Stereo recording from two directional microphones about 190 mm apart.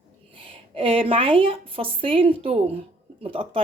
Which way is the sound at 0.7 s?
30° right (ahead or behind).